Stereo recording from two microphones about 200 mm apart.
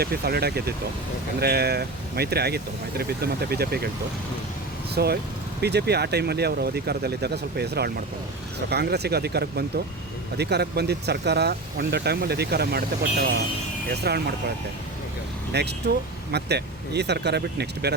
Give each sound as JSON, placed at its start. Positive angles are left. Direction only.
{"t": 0.0, "sound": "speech", "side_deg": -50}
{"t": 4.9, "sound": "speech", "side_deg": -50}
{"t": 15.5, "sound": "speech", "side_deg": -55}